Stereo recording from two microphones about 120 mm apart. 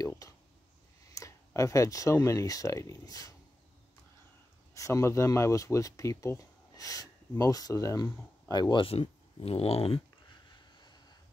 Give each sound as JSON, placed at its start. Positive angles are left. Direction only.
{"t": 0.0, "sound": "a sound", "side_deg": 30}
{"t": 1.1, "sound": "speech", "side_deg": 25}
{"t": 4.7, "sound": "speech", "side_deg": 25}
{"t": 8.8, "sound": "speech", "side_deg": 50}